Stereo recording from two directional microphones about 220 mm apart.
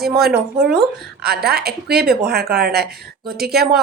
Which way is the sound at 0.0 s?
45° right (ahead or behind).